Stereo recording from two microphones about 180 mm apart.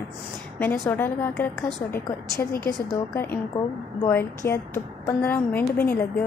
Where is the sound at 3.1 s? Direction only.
10° left (ahead or behind).